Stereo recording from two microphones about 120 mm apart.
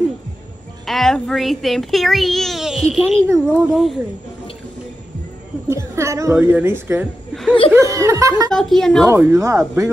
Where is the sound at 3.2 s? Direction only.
20° right (ahead or behind).